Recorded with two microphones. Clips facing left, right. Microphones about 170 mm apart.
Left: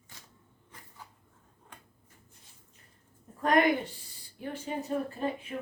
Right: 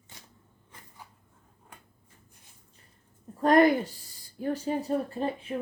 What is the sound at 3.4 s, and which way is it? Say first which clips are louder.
A woman's voice: right 5 dB; 35° right (ahead or behind).